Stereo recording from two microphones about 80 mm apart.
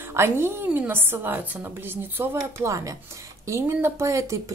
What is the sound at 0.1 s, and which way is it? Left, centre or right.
A woman's voice, right.